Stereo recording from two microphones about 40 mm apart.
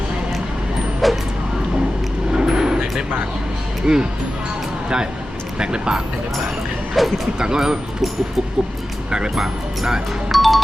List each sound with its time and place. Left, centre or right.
1.0 s vehicle: centre
2.3 s vehicle: centre
3.8 s speech: centre
5.5 s speech: right
7.0 s speech: centre
7.3 s speech: centre
9.0 s speech: centre
9.3 s speech: centre
10.3 s music: centre